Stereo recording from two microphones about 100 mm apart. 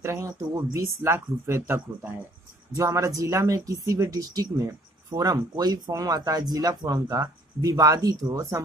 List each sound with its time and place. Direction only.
0.0 s speech: 30° right (ahead or behind)